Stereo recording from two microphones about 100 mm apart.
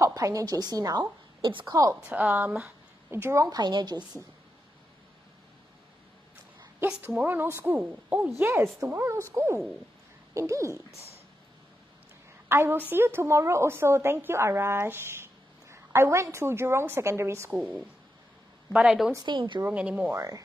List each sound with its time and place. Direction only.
0.0 s a woman's voice: 35° right (ahead or behind)
1.4 s a woman's voice: 55° right (ahead or behind)
1.7 s speech: 35° right (ahead or behind)
2.0 s a woman's voice: 15° right (ahead or behind)
3.1 s a woman's voice: 25° right (ahead or behind)
3.4 s a woman's voice: 45° right (ahead or behind)
7.2 s a woman's voice: 20° right (ahead or behind)
12.4 s a woman's voice: 25° right (ahead or behind)
18.7 s a woman's voice: 10° right (ahead or behind)
19.2 s a woman's voice: 50° right (ahead or behind)
19.6 s a woman's voice: 15° right (ahead or behind)
20.2 s speech: 35° right (ahead or behind)